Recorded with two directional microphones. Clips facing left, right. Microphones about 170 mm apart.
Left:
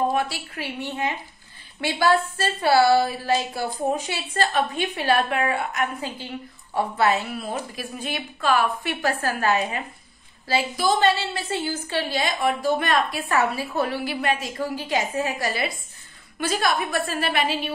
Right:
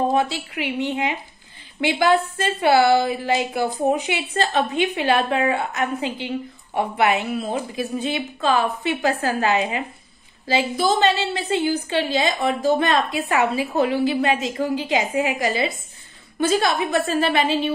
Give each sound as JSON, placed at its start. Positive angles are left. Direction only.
{"t": 0.1, "sound": "a woman's voice", "side_deg": -25}